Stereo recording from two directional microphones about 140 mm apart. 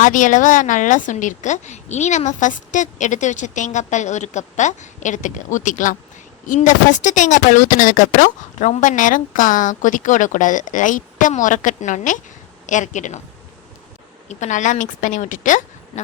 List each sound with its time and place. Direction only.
0.0 s a woman's voice: 65° left (ahead or behind)
14.3 s a woman's voice: 60° left (ahead or behind)